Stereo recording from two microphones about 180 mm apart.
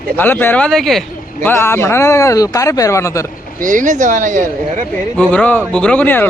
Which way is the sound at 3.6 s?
45° right (ahead or behind).